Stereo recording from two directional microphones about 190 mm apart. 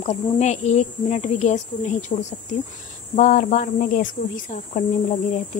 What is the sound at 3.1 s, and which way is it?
Speech, 40° left (ahead or behind).